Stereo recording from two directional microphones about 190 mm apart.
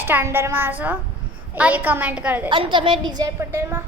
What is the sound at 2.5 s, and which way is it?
A woman's voice, 25° right (ahead or behind).